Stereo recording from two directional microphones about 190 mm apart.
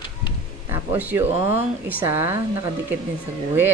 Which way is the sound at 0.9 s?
10° right (ahead or behind).